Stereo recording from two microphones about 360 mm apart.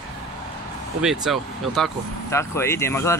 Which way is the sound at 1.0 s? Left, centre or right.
Centre.